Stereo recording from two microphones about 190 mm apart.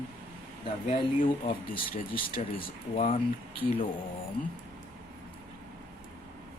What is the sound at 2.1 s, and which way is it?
Speech, 50° left (ahead or behind).